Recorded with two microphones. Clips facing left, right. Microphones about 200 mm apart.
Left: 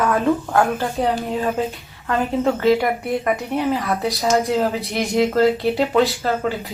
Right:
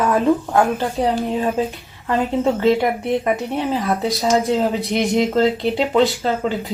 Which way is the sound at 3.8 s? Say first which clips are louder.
Right 1 dB; 15° right (ahead or behind).